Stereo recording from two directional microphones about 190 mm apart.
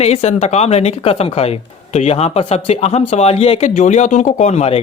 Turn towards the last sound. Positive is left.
turn(degrees=35)  # may be behind; listen again after turning